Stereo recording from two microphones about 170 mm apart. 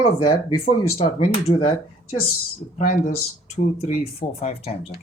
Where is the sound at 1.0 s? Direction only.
35° left (ahead or behind).